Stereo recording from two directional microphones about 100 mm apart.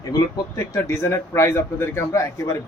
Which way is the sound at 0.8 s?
30° left (ahead or behind).